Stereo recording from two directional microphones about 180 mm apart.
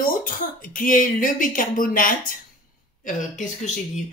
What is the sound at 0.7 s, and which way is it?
Speech, 45° left (ahead or behind).